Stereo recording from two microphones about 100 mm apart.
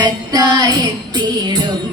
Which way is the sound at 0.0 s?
45° right (ahead or behind).